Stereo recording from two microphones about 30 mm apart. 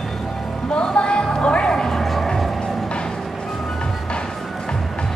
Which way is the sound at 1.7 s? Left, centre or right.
Centre.